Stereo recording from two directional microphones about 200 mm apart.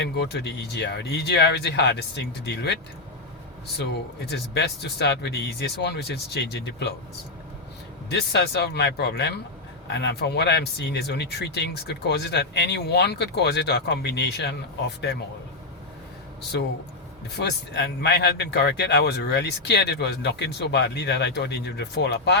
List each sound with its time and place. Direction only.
0.0 s speech: 60° left (ahead or behind)
3.8 s speech: 55° left (ahead or behind)
8.1 s speech: 60° left (ahead or behind)
17.3 s speech: 55° left (ahead or behind)